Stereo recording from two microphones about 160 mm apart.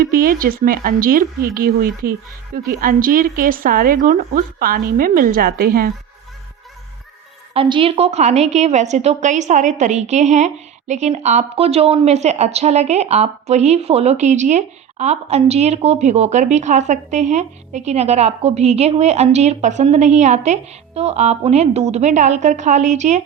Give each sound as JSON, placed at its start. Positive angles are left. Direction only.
{"t": 0.1, "sound": "a woman's voice", "side_deg": -65}
{"t": 7.5, "sound": "a woman's voice", "side_deg": -35}